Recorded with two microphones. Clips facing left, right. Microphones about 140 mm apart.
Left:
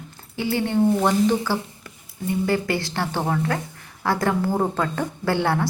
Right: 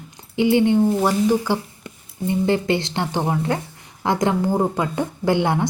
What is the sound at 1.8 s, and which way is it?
A woman's voice, 25° right (ahead or behind).